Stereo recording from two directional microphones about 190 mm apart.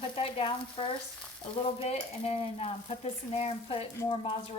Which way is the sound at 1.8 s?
30° left (ahead or behind).